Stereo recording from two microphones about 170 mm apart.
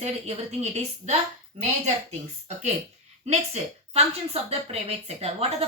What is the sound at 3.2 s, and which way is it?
A woman's voice, 40° right (ahead or behind).